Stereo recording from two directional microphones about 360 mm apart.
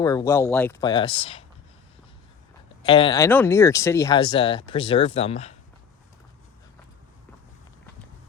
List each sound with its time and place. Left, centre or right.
0.0 s speech: centre
2.8 s speech: centre